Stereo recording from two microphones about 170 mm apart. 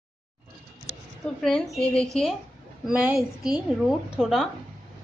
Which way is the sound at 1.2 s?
Centre (ahead or behind).